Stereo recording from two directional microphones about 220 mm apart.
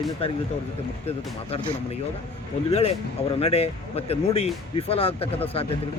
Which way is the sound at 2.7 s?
30° left (ahead or behind).